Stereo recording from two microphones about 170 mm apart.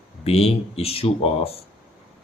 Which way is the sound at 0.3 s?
35° left (ahead or behind).